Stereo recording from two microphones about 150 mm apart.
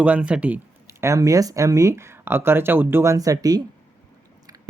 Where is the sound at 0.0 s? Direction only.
10° right (ahead or behind).